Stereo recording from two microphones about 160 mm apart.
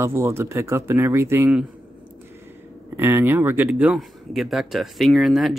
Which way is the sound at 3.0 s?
15° right (ahead or behind).